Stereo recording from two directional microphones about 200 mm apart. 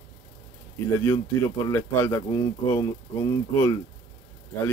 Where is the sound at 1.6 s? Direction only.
15° left (ahead or behind).